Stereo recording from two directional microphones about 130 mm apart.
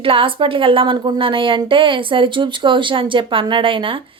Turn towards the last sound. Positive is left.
turn(degrees=-40)  # may be behind; listen again after turning